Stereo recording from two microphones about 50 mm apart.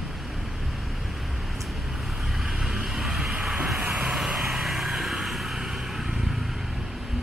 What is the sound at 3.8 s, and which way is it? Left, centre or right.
Vehicle, right.